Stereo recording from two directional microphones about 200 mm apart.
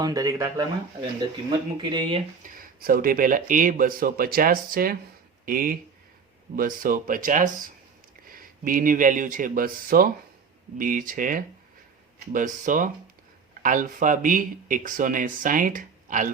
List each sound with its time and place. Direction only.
0.0 s speech: 15° right (ahead or behind)
2.5 s speech: 45° right (ahead or behind)